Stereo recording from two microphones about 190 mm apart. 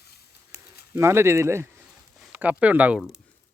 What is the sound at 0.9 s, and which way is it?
Speech, 15° right (ahead or behind).